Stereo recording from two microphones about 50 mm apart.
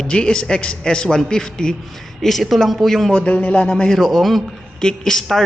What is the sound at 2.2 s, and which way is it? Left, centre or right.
Speech, centre.